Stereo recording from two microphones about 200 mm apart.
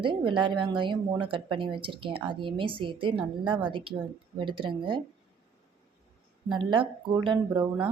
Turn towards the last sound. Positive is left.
turn(degrees=-25)  # may be behind; listen again after turning